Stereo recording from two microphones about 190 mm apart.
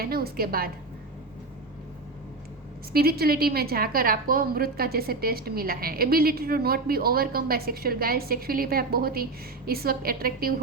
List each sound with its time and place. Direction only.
0.0 s a woman's voice: 50° right (ahead or behind)
2.9 s a woman's voice: 55° right (ahead or behind)